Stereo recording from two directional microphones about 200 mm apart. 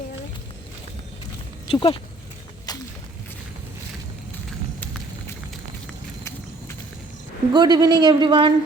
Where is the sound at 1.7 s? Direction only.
25° left (ahead or behind).